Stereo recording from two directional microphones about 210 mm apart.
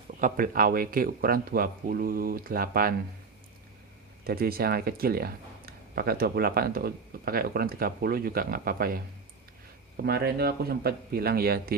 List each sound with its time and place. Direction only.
0.2 s speech: 40° right (ahead or behind)
4.2 s speech: 45° right (ahead or behind)
10.0 s speech: 50° right (ahead or behind)